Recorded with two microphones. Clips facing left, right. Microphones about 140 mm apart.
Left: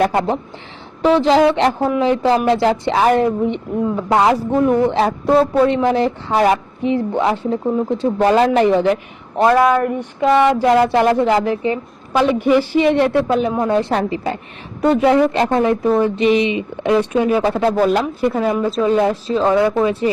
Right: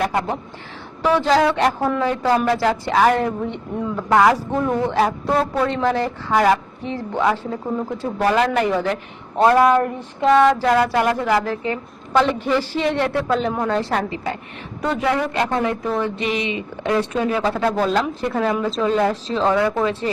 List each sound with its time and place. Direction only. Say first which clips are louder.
0.0 s speech: left 5 dB; 35° left (ahead or behind)
1.0 s a woman's voice: left 4 dB; 20° left (ahead or behind)
9.4 s a woman's voice: left 1 dB; 5° left (ahead or behind)
10.7 s a woman's voice: left 4 dB; 25° left (ahead or behind)
19.3 s a woman's voice: left 4 dB; 10° left (ahead or behind)